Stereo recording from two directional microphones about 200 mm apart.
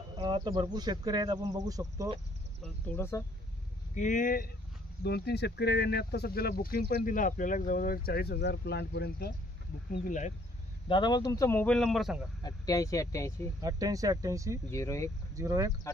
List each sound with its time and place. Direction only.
0.2 s speech: 20° right (ahead or behind)
2.6 s speech: 10° left (ahead or behind)
3.9 s speech: 40° left (ahead or behind)
5.0 s speech: 55° left (ahead or behind)
10.0 s speech: 40° left (ahead or behind)
10.9 s speech: 20° left (ahead or behind); by 12.2 s centre (ahead or behind)
12.4 s speech: 15° left (ahead or behind)
13.6 s speech: 20° right (ahead or behind)
14.7 s speech: 15° left (ahead or behind)
15.3 s speech: 15° right (ahead or behind)